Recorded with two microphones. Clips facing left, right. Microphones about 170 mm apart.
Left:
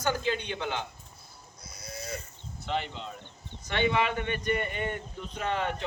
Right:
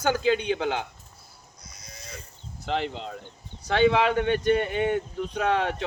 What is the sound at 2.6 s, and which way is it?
Speech, 90° right.